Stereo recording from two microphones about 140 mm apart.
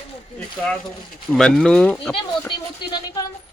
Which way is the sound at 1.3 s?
5° left (ahead or behind).